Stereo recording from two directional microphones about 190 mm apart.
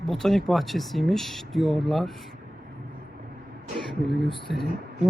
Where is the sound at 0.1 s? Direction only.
Centre (ahead or behind).